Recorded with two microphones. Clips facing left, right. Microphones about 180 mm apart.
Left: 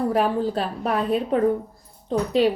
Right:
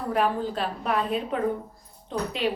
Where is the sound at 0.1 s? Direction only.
35° left (ahead or behind).